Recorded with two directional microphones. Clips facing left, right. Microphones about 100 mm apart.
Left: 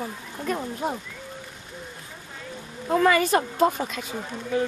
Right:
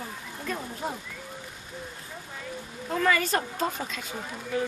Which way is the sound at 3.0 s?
15° left (ahead or behind).